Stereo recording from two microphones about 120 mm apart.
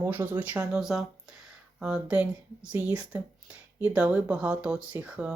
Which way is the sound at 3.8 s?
15° right (ahead or behind).